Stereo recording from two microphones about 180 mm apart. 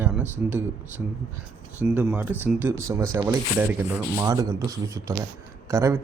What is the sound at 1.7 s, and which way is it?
Speech, 10° right (ahead or behind).